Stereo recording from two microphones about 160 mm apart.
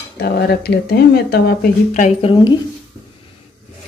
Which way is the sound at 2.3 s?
30° left (ahead or behind).